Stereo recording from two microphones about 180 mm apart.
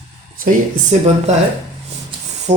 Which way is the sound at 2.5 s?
35° right (ahead or behind).